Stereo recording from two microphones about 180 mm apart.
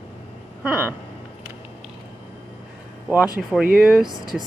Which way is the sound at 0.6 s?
10° right (ahead or behind).